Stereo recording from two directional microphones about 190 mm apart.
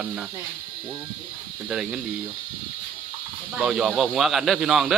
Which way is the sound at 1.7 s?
5° right (ahead or behind).